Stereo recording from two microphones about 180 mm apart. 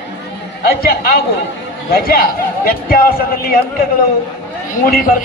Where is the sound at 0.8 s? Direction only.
55° left (ahead or behind).